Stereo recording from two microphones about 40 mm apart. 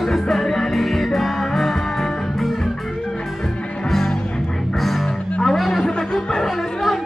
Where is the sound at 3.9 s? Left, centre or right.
Centre.